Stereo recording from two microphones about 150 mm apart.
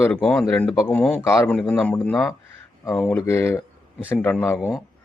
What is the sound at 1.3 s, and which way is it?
Speech, 20° left (ahead or behind).